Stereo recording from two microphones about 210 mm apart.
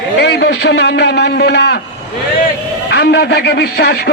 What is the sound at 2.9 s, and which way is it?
A man's voice, 50° left (ahead or behind).